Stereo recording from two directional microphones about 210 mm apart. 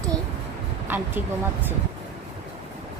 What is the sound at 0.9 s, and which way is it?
Speech, 10° right (ahead or behind).